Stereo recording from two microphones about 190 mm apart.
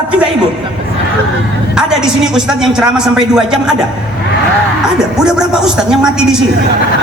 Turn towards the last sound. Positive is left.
turn(degrees=-5)  # may be behind; listen again after turning